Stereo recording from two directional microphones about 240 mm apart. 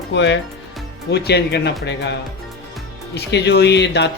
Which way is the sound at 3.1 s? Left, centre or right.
Left.